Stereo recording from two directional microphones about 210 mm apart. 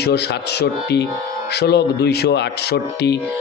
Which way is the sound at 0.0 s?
50° left (ahead or behind).